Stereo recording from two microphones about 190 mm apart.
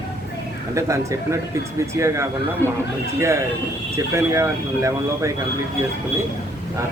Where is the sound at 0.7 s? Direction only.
15° right (ahead or behind).